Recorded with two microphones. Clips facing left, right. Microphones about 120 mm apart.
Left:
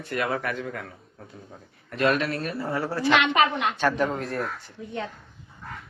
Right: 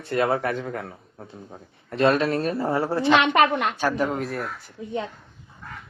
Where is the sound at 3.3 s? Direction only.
50° right (ahead or behind).